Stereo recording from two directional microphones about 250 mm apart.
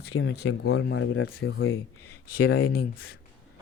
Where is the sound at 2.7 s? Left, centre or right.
Left.